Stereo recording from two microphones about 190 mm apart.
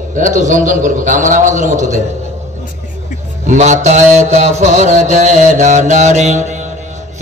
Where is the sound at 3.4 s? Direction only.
40° right (ahead or behind).